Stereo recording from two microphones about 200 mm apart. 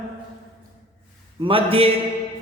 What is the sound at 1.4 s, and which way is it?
Speech, 25° right (ahead or behind).